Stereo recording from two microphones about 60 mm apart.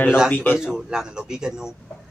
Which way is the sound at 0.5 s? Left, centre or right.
Centre.